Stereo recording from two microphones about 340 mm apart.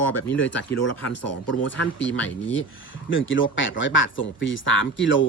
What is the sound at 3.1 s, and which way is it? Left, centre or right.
Speech, left.